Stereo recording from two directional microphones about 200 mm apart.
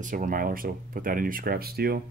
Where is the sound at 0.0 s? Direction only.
40° right (ahead or behind).